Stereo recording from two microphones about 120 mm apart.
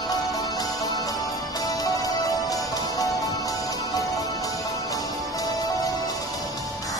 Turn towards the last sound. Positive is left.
turn(degrees=30)  # may be behind; listen again after turning